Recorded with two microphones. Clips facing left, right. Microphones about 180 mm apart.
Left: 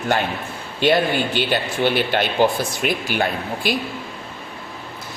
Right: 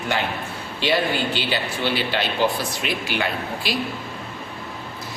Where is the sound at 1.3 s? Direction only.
55° left (ahead or behind).